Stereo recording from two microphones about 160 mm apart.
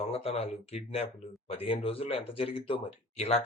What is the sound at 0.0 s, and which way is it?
Speech, 40° left (ahead or behind).